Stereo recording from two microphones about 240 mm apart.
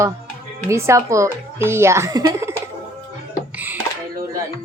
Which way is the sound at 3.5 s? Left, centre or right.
Centre.